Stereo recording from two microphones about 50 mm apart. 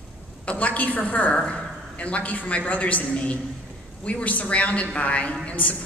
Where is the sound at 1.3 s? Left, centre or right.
Left.